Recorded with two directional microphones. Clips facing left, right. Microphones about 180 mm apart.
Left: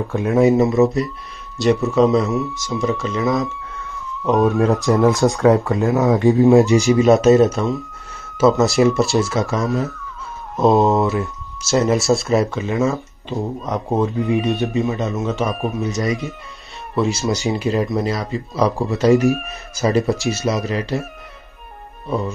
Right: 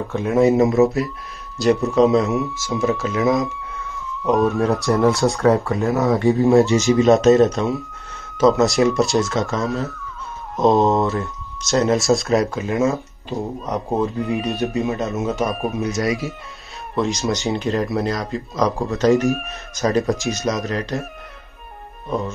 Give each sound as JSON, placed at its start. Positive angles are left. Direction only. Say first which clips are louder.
{"t": 0.1, "sound": "speech", "louder": "left 1 dB", "side_deg": 0}
{"t": 5.3, "sound": "speech", "louder": "left 2 dB", "side_deg": 15}
{"t": 5.9, "sound": "speech", "louder": "left 2 dB", "side_deg": 0}